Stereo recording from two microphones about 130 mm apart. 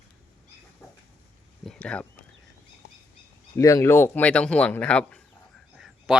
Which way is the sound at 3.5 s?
25° left (ahead or behind).